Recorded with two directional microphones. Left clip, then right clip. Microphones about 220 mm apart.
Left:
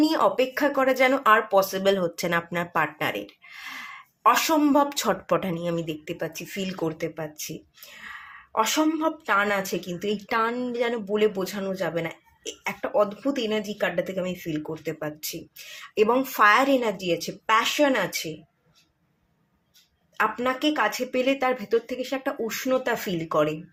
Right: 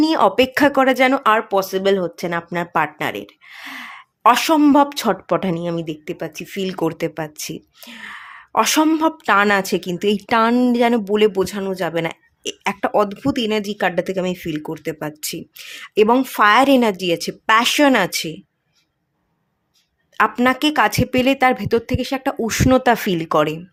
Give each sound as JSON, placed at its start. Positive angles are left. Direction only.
{"t": 0.0, "sound": "speech", "side_deg": -35}
{"t": 20.1, "sound": "speech", "side_deg": -45}